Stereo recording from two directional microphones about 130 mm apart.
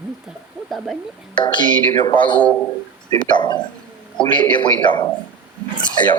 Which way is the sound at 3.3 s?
35° left (ahead or behind).